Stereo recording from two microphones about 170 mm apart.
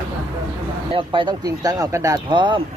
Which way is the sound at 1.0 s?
30° right (ahead or behind).